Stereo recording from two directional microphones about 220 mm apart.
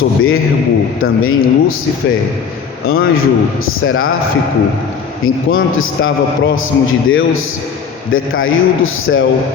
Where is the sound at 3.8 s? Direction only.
70° left (ahead or behind).